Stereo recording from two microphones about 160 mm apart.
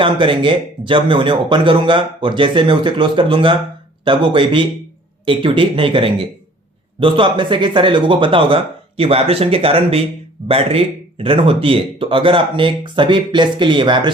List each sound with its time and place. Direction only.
0.0 s speech: 30° right (ahead or behind)